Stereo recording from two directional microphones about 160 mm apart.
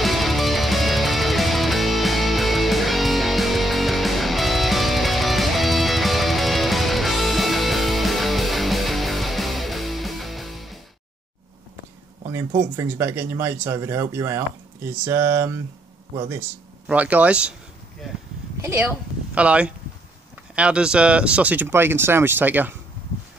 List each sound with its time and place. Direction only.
0.0 s music: centre (ahead or behind)
12.3 s speech: 15° right (ahead or behind)
18.6 s speech: 15° right (ahead or behind)